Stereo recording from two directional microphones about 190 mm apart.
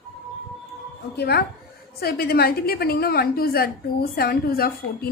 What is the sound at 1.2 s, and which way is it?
A woman's voice, 55° left (ahead or behind).